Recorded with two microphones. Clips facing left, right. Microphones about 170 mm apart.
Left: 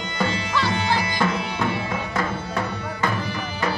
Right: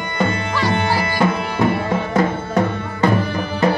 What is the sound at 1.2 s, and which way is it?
Tabla, 55° right (ahead or behind).